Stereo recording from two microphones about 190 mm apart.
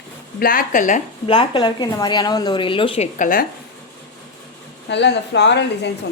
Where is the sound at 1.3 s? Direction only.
25° left (ahead or behind).